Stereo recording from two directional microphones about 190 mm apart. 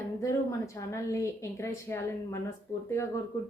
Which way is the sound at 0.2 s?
15° left (ahead or behind).